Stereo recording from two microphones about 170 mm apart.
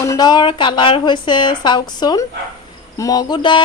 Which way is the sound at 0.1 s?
25° left (ahead or behind).